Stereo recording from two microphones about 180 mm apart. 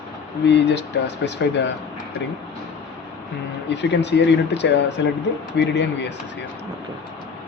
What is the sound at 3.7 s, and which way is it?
Speech, 75° left (ahead or behind).